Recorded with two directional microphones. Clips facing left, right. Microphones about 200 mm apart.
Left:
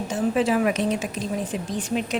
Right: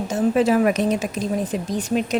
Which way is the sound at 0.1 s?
40° right (ahead or behind).